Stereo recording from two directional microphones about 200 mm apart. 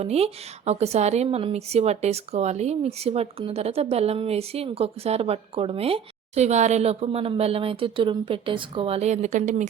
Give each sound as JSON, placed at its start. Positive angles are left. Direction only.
{"t": 0.0, "sound": "speech", "side_deg": -30}